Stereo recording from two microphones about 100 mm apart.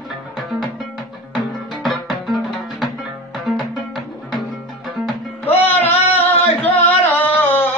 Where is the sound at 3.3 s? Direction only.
Centre (ahead or behind).